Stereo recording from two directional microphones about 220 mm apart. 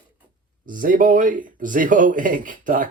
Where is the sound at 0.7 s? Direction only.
40° right (ahead or behind).